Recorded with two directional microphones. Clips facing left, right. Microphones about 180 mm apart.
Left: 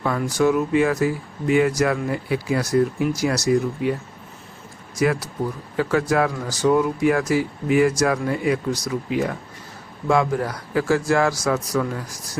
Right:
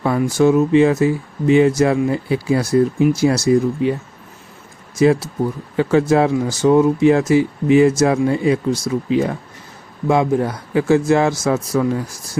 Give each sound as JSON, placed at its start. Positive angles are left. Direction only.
{"t": 0.0, "sound": "speech", "side_deg": -25}
{"t": 4.9, "sound": "speech", "side_deg": -25}